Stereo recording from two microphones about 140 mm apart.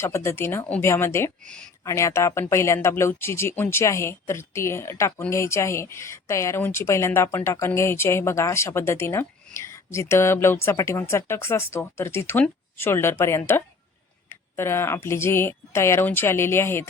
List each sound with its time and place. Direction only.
0.0 s speech: 20° left (ahead or behind)